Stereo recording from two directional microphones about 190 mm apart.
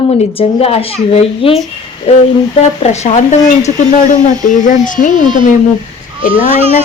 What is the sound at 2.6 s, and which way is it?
Speech, 35° left (ahead or behind).